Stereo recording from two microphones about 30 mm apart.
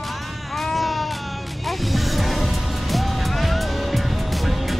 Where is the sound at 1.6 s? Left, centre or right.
Centre.